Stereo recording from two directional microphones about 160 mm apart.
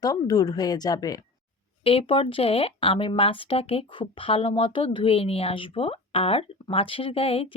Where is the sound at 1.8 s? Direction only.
35° left (ahead or behind).